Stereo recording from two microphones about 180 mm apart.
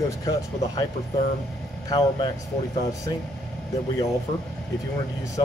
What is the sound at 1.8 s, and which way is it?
Speech, 20° left (ahead or behind).